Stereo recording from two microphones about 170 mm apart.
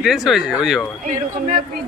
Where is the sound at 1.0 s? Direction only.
50° right (ahead or behind).